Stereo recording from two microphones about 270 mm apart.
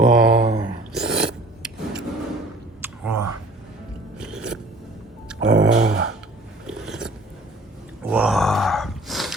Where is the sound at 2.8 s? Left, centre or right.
Centre.